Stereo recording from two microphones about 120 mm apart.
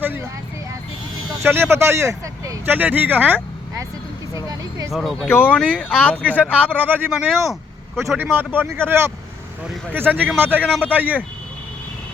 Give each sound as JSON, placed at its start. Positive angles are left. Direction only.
{"t": 1.4, "sound": "speech", "side_deg": -20}
{"t": 2.7, "sound": "speech", "side_deg": -15}
{"t": 4.4, "sound": "speech", "side_deg": -30}
{"t": 4.9, "sound": "speech", "side_deg": 0}
{"t": 5.3, "sound": "speech", "side_deg": 15}
{"t": 6.2, "sound": "speech", "side_deg": -10}
{"t": 7.1, "sound": "speech", "side_deg": 0}
{"t": 8.1, "sound": "speech", "side_deg": -15}